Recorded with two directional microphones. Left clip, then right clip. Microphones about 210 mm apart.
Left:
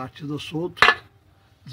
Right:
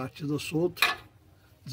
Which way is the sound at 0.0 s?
10° right (ahead or behind).